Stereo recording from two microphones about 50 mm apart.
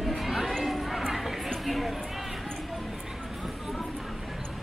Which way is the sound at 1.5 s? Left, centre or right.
Centre.